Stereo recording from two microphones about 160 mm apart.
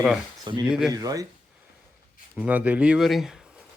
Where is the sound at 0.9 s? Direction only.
20° right (ahead or behind).